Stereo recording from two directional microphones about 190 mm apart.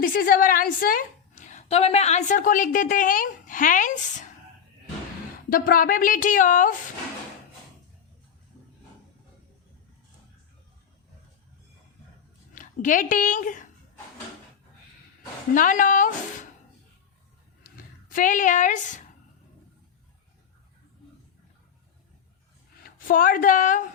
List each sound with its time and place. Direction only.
0.0 s a woman's voice: 50° left (ahead or behind)
1.5 s a woman's voice: 35° left (ahead or behind)
5.5 s a woman's voice: 50° left (ahead or behind)
12.5 s a woman's voice: 45° left (ahead or behind)
15.5 s a woman's voice: 45° left (ahead or behind)
18.1 s a woman's voice: 45° left (ahead or behind)
22.8 s a woman's voice: 45° left (ahead or behind)